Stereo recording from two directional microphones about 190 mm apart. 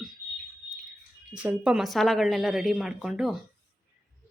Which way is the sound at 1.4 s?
5° right (ahead or behind).